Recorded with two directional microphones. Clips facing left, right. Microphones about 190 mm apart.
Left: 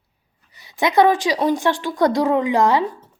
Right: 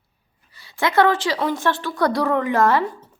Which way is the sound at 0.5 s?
20° left (ahead or behind).